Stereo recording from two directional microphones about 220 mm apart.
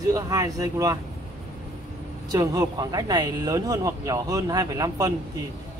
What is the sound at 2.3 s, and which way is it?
Speech, 15° right (ahead or behind).